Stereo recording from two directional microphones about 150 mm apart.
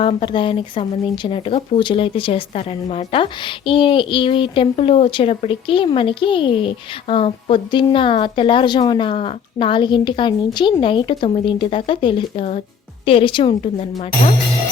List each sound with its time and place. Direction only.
0.0 s speech: 35° left (ahead or behind)